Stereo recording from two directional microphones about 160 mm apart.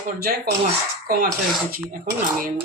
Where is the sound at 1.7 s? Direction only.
60° right (ahead or behind).